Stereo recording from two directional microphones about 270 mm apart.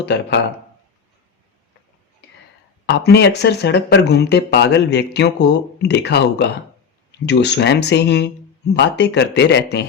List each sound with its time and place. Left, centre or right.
0.0 s speech: left
2.8 s speech: left